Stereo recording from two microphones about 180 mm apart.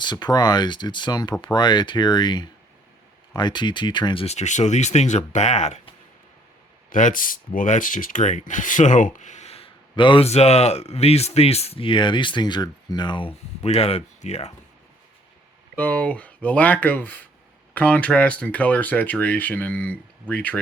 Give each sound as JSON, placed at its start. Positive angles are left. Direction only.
{"t": 0.0, "sound": "speech", "side_deg": 25}
{"t": 6.9, "sound": "speech", "side_deg": 50}
{"t": 15.7, "sound": "speech", "side_deg": 10}